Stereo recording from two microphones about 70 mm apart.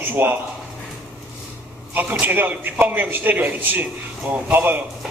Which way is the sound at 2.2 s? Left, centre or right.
Right.